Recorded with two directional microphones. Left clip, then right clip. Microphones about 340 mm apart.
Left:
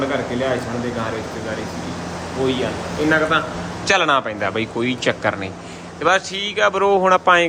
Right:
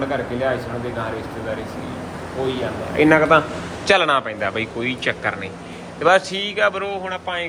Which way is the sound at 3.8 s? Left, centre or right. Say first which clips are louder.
Even; centre.